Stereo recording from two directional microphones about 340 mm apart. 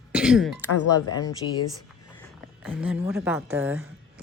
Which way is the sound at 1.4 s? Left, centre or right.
Left.